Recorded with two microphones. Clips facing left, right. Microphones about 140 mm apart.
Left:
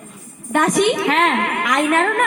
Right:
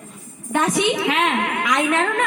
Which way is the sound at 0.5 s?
55° left (ahead or behind).